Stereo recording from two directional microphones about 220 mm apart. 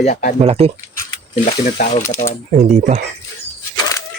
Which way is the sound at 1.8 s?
35° left (ahead or behind).